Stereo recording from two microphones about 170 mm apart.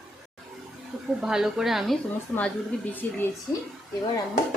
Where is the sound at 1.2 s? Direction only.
5° right (ahead or behind).